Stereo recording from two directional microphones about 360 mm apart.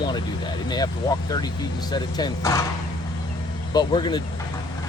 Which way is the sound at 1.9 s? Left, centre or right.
Centre.